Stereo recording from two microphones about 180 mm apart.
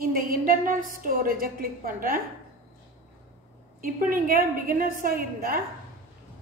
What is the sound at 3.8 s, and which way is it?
A woman's voice, 50° right (ahead or behind).